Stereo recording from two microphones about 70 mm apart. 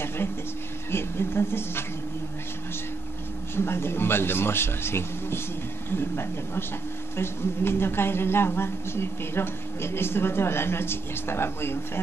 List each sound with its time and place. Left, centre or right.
0.9 s a woman's voice: left
3.5 s a woman's voice: left